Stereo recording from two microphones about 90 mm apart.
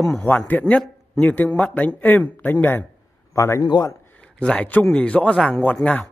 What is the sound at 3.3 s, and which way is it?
Speech, 35° left (ahead or behind).